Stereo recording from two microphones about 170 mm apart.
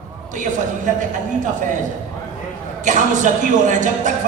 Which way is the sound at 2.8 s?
45° right (ahead or behind).